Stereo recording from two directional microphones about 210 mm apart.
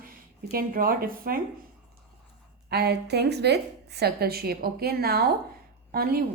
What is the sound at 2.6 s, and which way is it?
A woman's voice, 50° right (ahead or behind).